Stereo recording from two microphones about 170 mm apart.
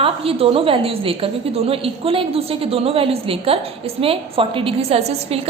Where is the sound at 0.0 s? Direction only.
35° right (ahead or behind).